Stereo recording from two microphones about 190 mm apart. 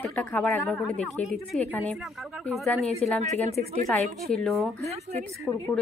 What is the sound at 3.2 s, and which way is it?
Speech, 35° right (ahead or behind).